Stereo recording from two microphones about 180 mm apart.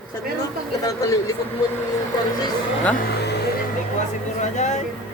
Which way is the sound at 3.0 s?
65° left (ahead or behind).